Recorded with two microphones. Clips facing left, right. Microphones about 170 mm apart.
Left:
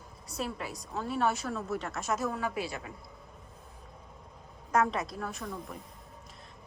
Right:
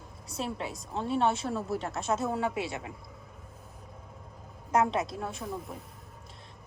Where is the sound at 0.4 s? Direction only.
25° right (ahead or behind).